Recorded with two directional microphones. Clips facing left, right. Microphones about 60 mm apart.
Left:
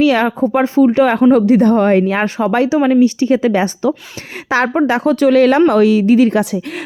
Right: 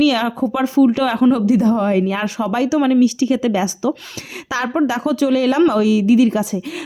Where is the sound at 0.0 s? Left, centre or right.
Left.